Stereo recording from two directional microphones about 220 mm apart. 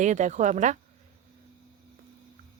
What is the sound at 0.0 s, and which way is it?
Speech, 35° right (ahead or behind).